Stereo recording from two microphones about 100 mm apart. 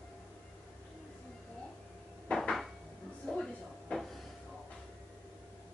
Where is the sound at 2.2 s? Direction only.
5° left (ahead or behind).